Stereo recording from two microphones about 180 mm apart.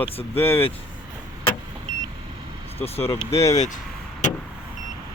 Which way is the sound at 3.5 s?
40° left (ahead or behind).